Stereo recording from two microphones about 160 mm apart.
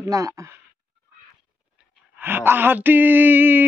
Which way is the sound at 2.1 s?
15° right (ahead or behind).